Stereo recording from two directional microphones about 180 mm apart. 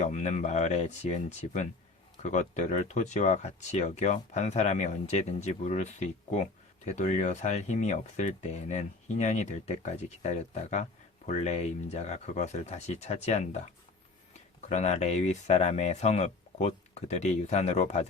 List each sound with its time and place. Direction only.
0.0 s speech: 40° left (ahead or behind)
14.7 s speech: 40° left (ahead or behind)